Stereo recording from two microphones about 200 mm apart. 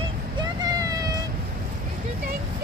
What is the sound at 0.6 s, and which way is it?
Vehicle, 20° right (ahead or behind).